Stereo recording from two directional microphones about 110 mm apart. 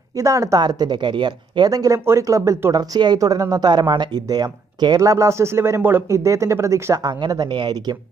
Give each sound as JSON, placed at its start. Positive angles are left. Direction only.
{"t": 0.2, "sound": "speech", "side_deg": -30}
{"t": 1.7, "sound": "speech", "side_deg": -30}